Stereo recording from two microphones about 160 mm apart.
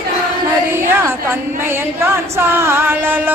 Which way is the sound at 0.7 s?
15° right (ahead or behind).